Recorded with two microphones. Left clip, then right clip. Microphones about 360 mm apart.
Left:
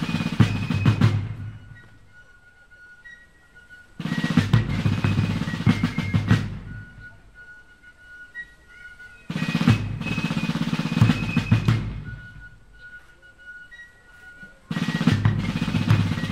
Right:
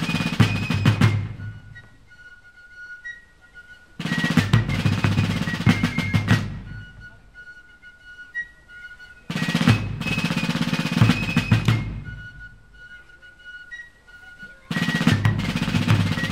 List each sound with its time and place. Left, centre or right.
0.0 s music: right
4.0 s drum: right
9.3 s music: right
14.7 s music: right